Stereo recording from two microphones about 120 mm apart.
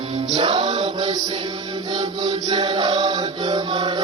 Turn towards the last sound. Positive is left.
turn(degrees=-35)  # may be behind; listen again after turning